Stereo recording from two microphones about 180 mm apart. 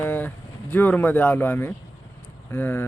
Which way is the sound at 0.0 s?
10° left (ahead or behind).